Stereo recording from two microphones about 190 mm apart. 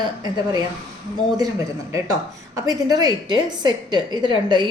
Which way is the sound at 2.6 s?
20° right (ahead or behind).